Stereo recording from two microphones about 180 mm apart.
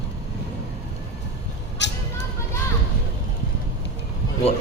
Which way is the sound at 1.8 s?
80° left.